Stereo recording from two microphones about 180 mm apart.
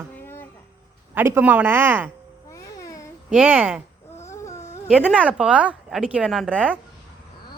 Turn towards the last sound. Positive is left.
turn(degrees=-5)  # may be behind; listen again after turning